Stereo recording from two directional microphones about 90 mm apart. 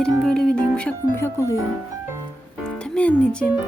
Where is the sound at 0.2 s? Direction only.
5° left (ahead or behind).